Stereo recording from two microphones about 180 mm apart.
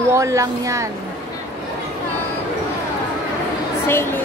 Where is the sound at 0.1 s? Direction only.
15° right (ahead or behind).